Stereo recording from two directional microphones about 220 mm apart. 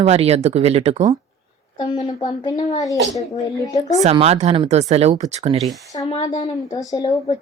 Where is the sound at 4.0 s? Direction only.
30° right (ahead or behind).